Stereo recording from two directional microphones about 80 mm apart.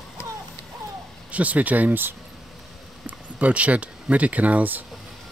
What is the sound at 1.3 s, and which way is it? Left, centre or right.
Speech, centre.